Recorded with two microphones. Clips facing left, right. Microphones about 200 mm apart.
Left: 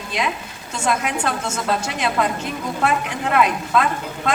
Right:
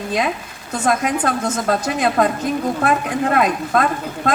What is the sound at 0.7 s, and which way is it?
A man's voice, 50° right (ahead or behind).